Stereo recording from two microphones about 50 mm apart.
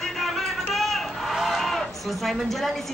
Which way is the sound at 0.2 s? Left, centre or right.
Centre.